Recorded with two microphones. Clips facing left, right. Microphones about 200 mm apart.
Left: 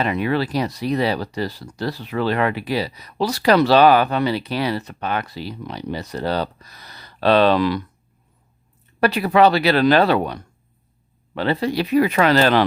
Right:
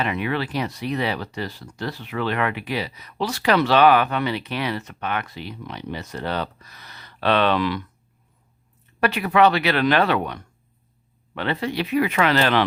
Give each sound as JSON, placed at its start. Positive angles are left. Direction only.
{"t": 0.0, "sound": "speech", "side_deg": 40}
{"t": 9.0, "sound": "speech", "side_deg": 35}